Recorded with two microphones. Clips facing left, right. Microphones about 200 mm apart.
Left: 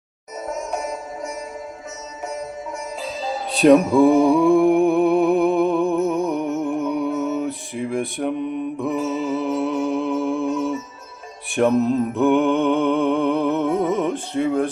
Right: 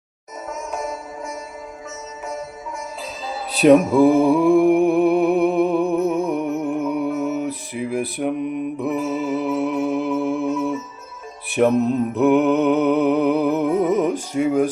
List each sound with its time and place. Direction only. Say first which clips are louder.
0.4 s music: left 1 dB; 35° left (ahead or behind)
3.5 s mantra: even; 5° right (ahead or behind)
8.4 s mantra: right 1 dB; 30° left (ahead or behind)
8.8 s mantra: even; 5° right (ahead or behind)
9.4 s music: right 1 dB; 5° right (ahead or behind)
11.8 s mantra: even; 35° left (ahead or behind)
12.1 s music: right 3 dB; 5° right (ahead or behind)